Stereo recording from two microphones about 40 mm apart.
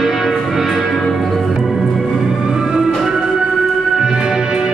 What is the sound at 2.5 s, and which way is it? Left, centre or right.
Music, centre.